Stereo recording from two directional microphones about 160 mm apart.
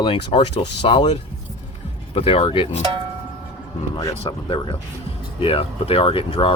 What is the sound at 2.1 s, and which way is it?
Speech, 35° left (ahead or behind).